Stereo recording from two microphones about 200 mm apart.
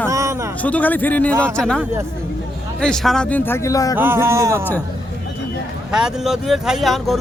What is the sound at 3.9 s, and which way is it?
Speech, 10° right (ahead or behind).